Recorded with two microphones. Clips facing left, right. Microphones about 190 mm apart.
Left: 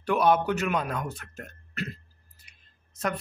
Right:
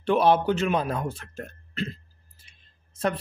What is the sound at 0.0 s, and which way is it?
A man's voice, 30° right (ahead or behind).